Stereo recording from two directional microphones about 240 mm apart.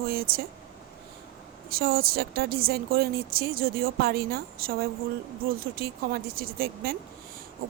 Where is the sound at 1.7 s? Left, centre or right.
Right.